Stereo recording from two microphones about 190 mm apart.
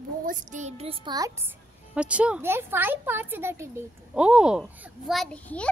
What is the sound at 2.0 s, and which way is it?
Speech, 5° right (ahead or behind).